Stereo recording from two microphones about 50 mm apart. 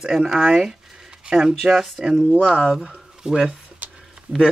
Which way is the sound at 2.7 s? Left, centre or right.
Centre.